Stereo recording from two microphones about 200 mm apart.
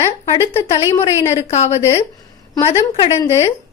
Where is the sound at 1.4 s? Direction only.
35° left (ahead or behind).